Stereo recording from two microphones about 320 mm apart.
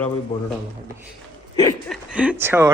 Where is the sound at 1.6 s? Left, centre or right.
Centre.